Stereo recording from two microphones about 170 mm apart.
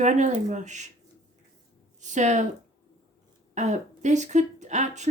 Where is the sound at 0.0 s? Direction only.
45° right (ahead or behind).